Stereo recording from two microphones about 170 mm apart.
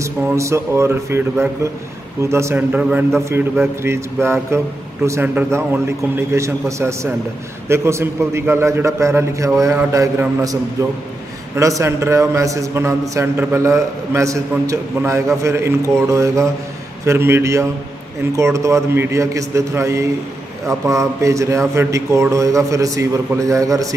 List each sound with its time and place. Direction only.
0.0 s a man's voice: 15° right (ahead or behind)